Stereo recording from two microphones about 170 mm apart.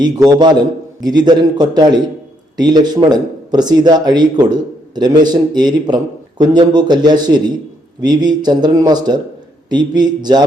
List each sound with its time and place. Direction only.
0.0 s a man's voice: 25° right (ahead or behind)